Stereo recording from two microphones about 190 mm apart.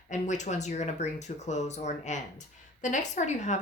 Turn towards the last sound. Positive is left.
turn(degrees=40)  # may be behind; listen again after turning